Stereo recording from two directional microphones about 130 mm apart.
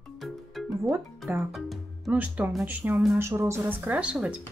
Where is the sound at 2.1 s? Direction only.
10° right (ahead or behind).